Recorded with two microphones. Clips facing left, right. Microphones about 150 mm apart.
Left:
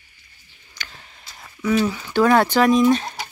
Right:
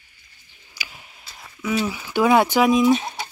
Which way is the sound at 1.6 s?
5° right (ahead or behind).